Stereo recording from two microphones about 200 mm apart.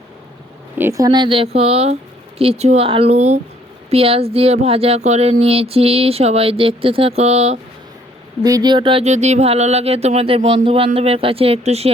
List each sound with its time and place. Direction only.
0.8 s speech: 15° right (ahead or behind); by 7.6 s 30° right (ahead or behind)
8.4 s speech: 20° right (ahead or behind)